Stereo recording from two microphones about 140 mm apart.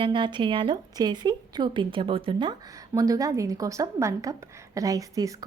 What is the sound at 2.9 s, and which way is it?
A woman's voice, 25° right (ahead or behind).